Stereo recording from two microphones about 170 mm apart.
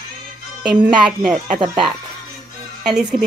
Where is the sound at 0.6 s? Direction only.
5° right (ahead or behind).